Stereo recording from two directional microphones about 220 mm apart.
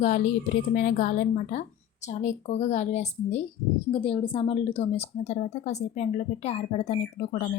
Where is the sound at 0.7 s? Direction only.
40° left (ahead or behind).